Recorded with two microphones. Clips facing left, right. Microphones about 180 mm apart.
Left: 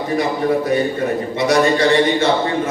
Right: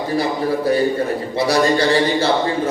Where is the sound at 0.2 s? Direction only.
30° right (ahead or behind).